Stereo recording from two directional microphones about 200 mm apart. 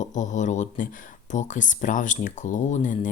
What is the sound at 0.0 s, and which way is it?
Speech, 40° left (ahead or behind).